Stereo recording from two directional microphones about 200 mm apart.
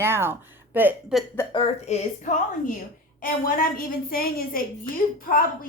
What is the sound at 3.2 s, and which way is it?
A woman's voice, 45° left (ahead or behind).